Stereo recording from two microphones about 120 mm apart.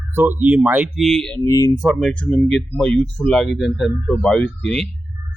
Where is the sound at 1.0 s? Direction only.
5° left (ahead or behind).